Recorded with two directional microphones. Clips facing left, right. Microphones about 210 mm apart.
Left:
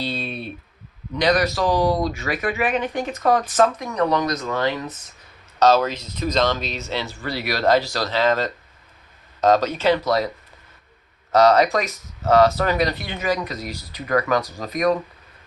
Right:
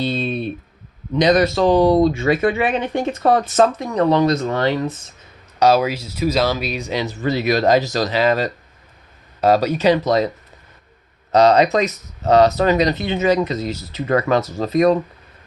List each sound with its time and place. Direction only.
0.0 s speech: 20° right (ahead or behind)
5.5 s speech: 10° right (ahead or behind)
11.3 s speech: 20° right (ahead or behind)